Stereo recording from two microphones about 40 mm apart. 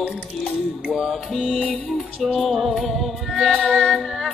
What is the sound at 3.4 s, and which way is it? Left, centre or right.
Music, right.